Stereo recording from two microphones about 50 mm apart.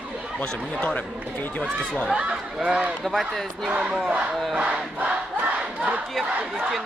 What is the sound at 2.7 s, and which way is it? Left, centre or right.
Speech, right.